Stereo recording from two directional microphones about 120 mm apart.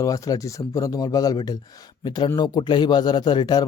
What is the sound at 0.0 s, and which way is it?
A man's voice, 30° left (ahead or behind).